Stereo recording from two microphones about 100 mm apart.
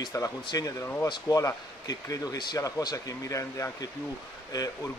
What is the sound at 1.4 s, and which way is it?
Speech, 35° left (ahead or behind).